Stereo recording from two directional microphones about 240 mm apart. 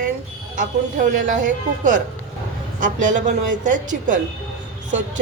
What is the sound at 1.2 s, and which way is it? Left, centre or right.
A woman's voice, right.